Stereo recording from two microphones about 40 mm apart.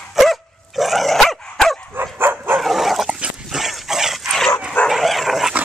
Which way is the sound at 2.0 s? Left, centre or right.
Right.